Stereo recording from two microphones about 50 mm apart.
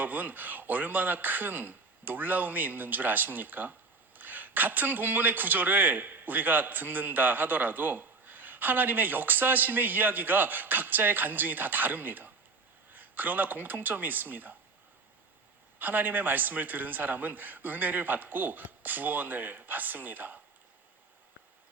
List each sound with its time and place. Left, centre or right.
0.0 s speech: right
15.8 s speech: right